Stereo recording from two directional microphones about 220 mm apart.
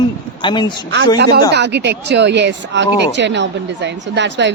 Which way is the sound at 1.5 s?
50° right (ahead or behind).